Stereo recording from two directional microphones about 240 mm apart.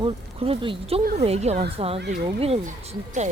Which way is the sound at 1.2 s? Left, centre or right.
Right.